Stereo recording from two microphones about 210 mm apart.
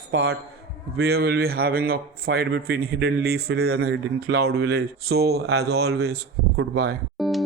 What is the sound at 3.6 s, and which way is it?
Speech, 80° right.